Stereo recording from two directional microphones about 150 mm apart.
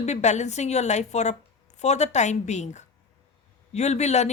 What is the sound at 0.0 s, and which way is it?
Speech, 50° left (ahead or behind).